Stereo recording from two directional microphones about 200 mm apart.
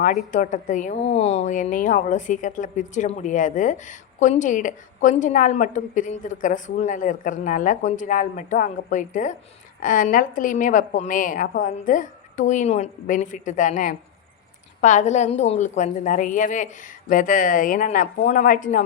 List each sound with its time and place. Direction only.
0.3 s a woman's voice: 40° left (ahead or behind)